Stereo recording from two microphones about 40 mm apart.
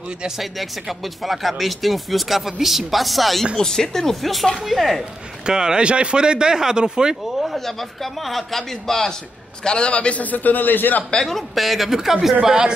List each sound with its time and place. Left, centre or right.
0.4 s speech: centre
3.5 s speech: centre
5.5 s speech: centre
7.3 s speech: centre
9.7 s a man's voice: left
10.2 s a man's voice: left
11.2 s speech: centre
12.4 s speech: centre